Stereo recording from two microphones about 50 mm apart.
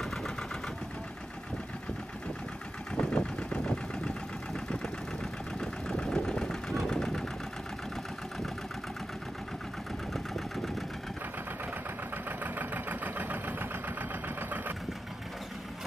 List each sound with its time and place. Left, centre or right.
0.0 s engine: centre
3.0 s engine: centre
5.6 s engine: centre
10.1 s engine: centre
12.3 s engine: right